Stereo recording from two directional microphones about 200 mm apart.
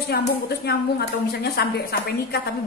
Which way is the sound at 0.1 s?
55° left (ahead or behind).